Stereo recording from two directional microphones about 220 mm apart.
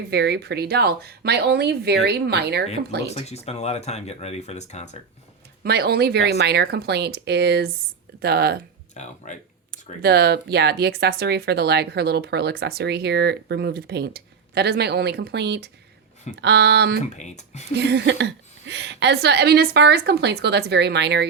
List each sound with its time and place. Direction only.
0.1 s speech: 50° right (ahead or behind)
3.1 s speech: 30° left (ahead or behind)
5.6 s speech: 45° right (ahead or behind)
9.0 s speech: 30° left (ahead or behind)
10.0 s speech: 45° right (ahead or behind)
17.2 s speech: 30° left (ahead or behind)
17.7 s speech: 50° right (ahead or behind)